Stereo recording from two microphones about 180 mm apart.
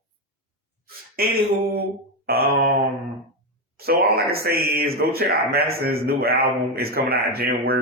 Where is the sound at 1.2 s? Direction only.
55° right (ahead or behind).